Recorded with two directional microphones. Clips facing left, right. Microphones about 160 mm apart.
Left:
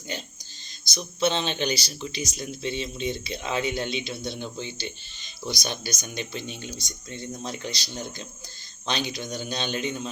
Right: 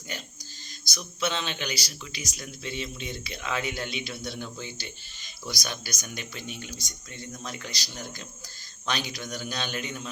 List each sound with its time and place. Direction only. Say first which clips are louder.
0.9 s speech: left 5 dB; 25° left (ahead or behind)